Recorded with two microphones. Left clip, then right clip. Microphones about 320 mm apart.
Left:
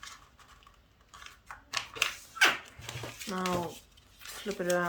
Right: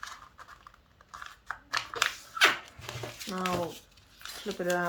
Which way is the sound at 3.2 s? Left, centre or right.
Centre.